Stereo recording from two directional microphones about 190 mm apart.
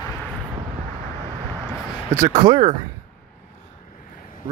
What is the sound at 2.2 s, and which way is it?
Speech, 20° right (ahead or behind).